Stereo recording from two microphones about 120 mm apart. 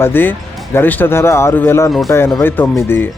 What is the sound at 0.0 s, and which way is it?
Speech, 15° left (ahead or behind).